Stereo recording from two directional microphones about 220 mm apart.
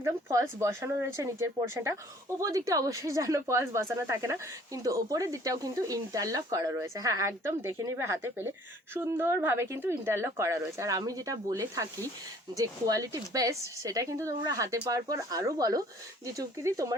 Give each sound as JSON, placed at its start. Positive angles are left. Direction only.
{"t": 0.0, "sound": "speech", "side_deg": -15}